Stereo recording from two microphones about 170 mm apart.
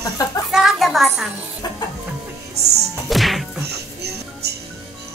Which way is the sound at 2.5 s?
75° right (ahead or behind).